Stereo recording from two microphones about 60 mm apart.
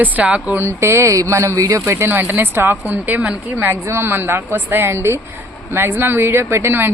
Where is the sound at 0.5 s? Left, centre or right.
Right.